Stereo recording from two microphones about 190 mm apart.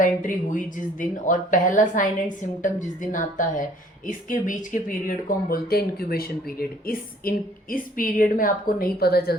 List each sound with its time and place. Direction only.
0.0 s speech: 45° left (ahead or behind)